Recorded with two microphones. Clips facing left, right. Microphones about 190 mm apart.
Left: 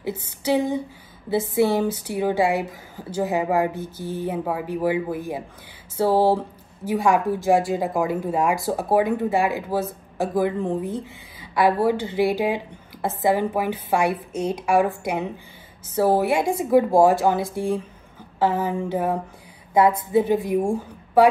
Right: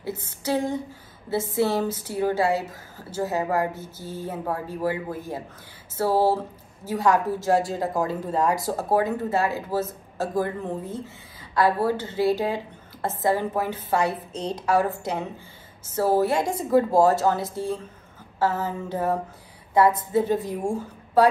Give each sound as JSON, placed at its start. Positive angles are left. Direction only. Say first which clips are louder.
{"t": 0.0, "sound": "a woman's voice", "louder": "left 3 dB", "side_deg": 10}